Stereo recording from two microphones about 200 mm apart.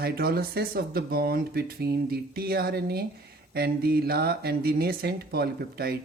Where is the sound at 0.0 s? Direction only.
50° right (ahead or behind).